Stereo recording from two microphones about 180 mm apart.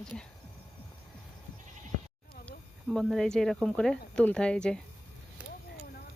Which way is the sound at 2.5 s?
Centre (ahead or behind).